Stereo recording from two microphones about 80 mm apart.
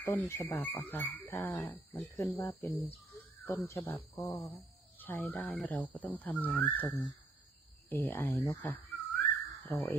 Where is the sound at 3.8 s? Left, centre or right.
Left.